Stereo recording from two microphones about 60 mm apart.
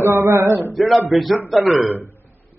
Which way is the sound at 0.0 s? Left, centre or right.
Right.